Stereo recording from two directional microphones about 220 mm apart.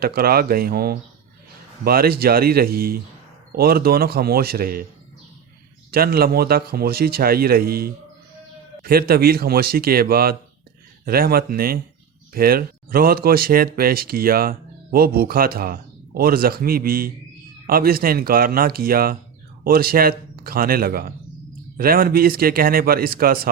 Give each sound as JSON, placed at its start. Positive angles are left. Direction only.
{"t": 0.0, "sound": "speech", "side_deg": -45}
{"t": 5.9, "sound": "a man's voice", "side_deg": -45}